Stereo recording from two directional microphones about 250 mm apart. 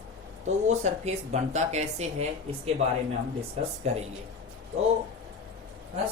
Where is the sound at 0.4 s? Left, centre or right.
Right.